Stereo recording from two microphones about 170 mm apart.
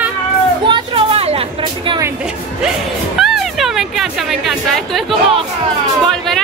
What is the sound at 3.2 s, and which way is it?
Speech, centre (ahead or behind).